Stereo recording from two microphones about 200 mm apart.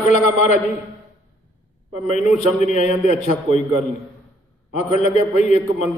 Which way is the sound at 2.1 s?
35° left (ahead or behind).